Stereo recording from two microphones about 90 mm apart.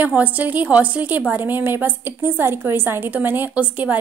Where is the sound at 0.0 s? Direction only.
20° right (ahead or behind).